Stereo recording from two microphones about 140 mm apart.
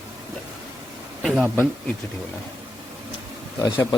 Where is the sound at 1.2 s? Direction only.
Centre (ahead or behind).